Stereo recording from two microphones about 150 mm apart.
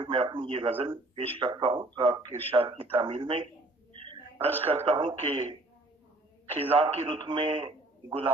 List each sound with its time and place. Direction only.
0.0 s speech: 35° right (ahead or behind)
3.9 s a sound: 35° right (ahead or behind)
4.6 s speech: 40° right (ahead or behind)